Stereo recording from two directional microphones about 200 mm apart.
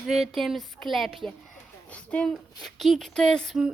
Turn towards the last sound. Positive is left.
turn(degrees=0)  # may be behind; listen again after turning